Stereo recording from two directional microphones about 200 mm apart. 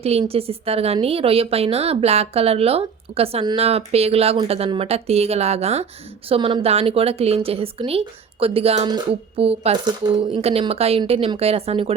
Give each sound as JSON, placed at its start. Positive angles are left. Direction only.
{"t": 0.0, "sound": "a woman's voice", "side_deg": -30}